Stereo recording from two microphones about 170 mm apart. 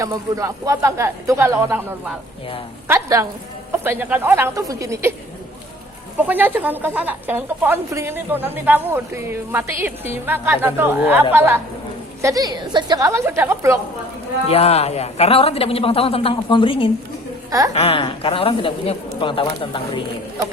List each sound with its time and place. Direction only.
0.0 s a woman's voice: 20° right (ahead or behind)
6.1 s a woman's voice: 10° right (ahead or behind)
14.4 s a woman's voice: 35° left (ahead or behind)